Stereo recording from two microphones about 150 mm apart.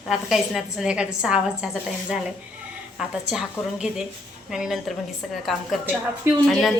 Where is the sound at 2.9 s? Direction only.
5° right (ahead or behind).